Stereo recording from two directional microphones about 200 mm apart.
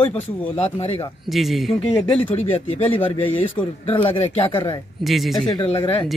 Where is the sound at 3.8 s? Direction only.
25° left (ahead or behind).